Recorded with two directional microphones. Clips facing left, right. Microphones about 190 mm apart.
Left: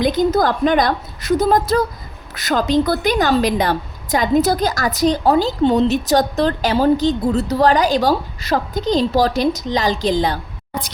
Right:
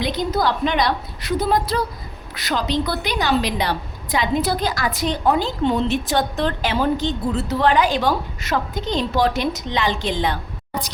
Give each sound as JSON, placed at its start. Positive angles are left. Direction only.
{"t": 0.0, "sound": "a woman's voice", "side_deg": 45}